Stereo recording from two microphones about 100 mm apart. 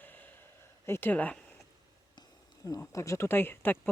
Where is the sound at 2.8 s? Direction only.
30° left (ahead or behind).